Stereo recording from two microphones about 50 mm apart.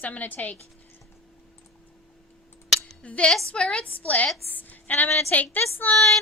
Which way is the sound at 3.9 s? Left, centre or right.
Left.